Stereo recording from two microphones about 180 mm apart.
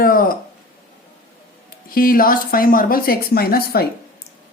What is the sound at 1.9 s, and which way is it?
Speech, 50° left (ahead or behind).